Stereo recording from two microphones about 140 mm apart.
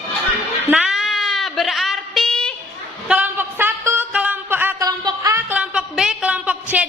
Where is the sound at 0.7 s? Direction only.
5° right (ahead or behind).